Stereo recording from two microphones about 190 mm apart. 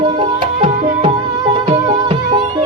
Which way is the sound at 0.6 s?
40° right (ahead or behind).